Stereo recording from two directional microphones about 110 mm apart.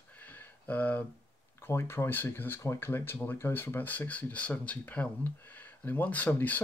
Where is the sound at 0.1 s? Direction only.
15° left (ahead or behind).